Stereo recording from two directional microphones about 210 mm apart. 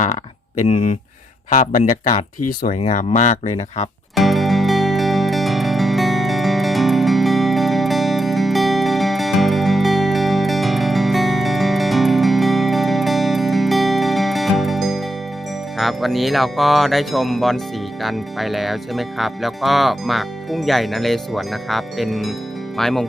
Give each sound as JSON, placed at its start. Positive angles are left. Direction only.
{"t": 0.7, "sound": "speech", "side_deg": 30}
{"t": 4.1, "sound": "music", "side_deg": 0}
{"t": 15.8, "sound": "speech", "side_deg": 0}